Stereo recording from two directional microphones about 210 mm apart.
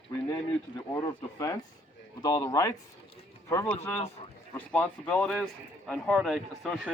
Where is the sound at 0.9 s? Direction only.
15° left (ahead or behind).